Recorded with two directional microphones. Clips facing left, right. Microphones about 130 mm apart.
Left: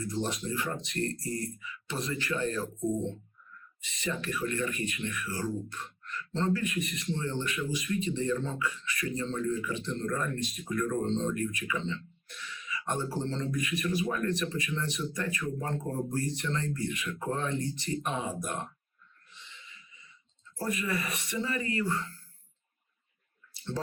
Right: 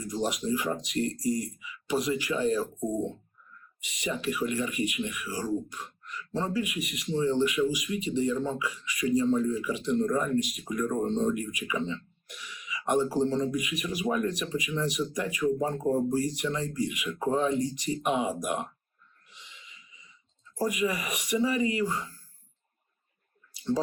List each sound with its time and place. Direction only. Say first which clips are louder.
0.0 s speech: right 3 dB; 15° right (ahead or behind)
19.3 s a sound: even; 15° right (ahead or behind)
20.6 s speech: right 4 dB; 15° right (ahead or behind)